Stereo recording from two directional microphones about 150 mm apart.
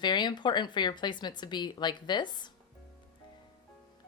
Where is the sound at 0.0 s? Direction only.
30° left (ahead or behind).